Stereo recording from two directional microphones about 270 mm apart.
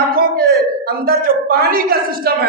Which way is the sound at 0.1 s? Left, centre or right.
Right.